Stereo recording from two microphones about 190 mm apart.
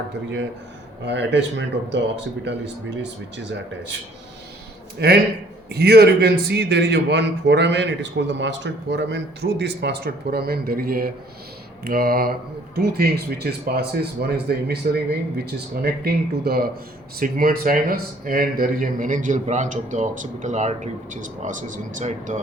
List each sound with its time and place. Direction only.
1.0 s speech: 65° right (ahead or behind)
3.0 s speech: 70° right (ahead or behind)
4.9 s a man's voice: 60° right (ahead or behind); by 22.4 s 40° right (ahead or behind)